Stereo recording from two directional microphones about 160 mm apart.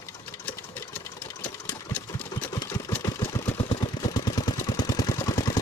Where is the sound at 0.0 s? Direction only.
15° left (ahead or behind).